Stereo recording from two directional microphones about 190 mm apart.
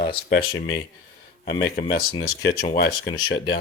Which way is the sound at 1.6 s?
55° left (ahead or behind).